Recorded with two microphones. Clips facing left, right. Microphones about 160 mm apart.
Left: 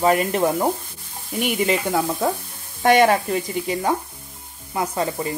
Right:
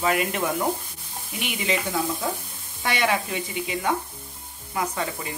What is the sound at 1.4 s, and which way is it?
Speech, 45° left (ahead or behind).